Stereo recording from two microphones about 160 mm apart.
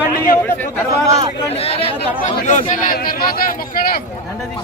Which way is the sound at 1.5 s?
35° left (ahead or behind).